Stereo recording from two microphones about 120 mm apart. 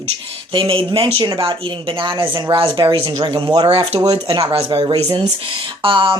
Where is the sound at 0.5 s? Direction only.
50° right (ahead or behind).